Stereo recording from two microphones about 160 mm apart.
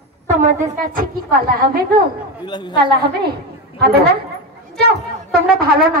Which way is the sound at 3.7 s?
80° right.